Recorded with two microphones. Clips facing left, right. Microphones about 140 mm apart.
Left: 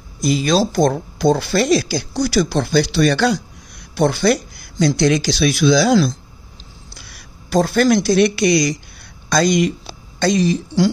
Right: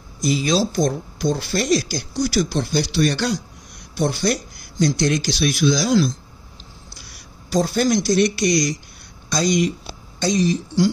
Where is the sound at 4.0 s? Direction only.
65° left (ahead or behind).